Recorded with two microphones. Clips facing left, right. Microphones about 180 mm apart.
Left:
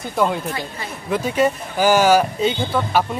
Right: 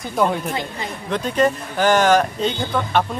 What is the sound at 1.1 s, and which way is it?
Speech, 5° left (ahead or behind).